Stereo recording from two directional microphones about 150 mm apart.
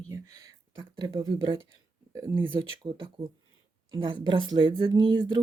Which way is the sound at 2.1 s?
15° right (ahead or behind).